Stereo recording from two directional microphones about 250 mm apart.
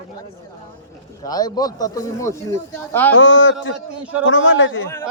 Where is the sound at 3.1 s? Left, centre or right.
Left.